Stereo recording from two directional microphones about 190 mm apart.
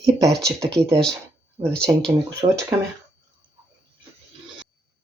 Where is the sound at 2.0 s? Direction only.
20° right (ahead or behind).